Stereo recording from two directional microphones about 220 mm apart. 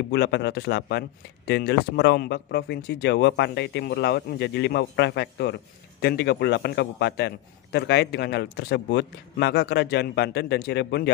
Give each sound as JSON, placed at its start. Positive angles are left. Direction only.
{"t": 0.1, "sound": "speech", "side_deg": 50}